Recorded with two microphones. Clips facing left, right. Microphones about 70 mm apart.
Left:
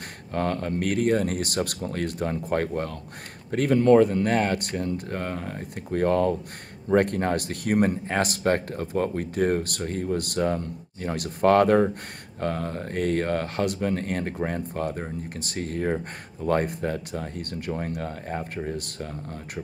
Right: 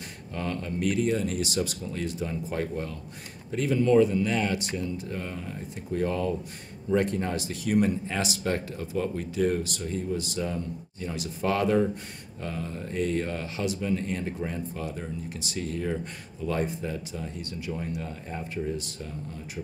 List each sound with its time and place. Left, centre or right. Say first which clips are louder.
0.3 s speech: left 6 dB; left